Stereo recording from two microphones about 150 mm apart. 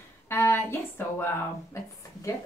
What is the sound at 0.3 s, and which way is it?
A woman's voice, 15° left (ahead or behind).